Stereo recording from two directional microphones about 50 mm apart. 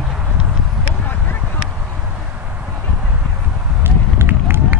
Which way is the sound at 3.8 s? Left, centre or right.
Right.